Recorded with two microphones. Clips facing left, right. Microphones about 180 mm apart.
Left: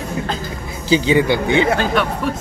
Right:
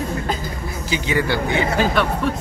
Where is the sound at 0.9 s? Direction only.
25° left (ahead or behind).